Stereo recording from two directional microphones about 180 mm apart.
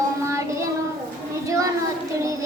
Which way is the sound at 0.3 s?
15° right (ahead or behind).